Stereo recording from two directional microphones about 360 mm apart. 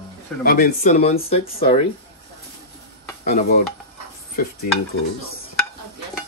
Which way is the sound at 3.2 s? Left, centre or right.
Left.